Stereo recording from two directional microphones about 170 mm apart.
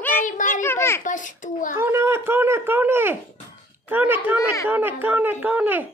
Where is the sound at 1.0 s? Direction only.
50° left (ahead or behind).